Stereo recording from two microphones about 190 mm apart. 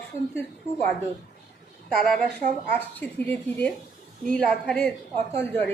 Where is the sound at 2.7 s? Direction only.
10° left (ahead or behind).